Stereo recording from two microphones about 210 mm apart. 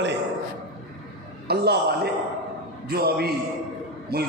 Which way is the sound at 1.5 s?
50° right (ahead or behind).